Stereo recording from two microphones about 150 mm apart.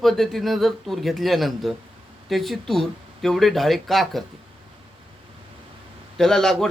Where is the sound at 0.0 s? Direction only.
Centre (ahead or behind).